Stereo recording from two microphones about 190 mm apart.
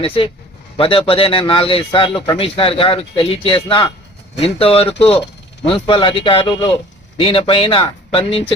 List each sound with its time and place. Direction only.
0.0 s a man's voice: 30° left (ahead or behind)